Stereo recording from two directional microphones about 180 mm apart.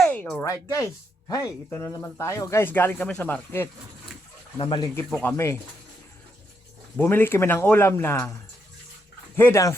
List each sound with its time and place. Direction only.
0.0 s a sound: 5° left (ahead or behind)
0.4 s speech: 20° left (ahead or behind)
4.5 s speech: 25° left (ahead or behind)
5.0 s speech: 5° left (ahead or behind)
6.9 s speech: 10° left (ahead or behind)
9.3 s speech: 15° left (ahead or behind)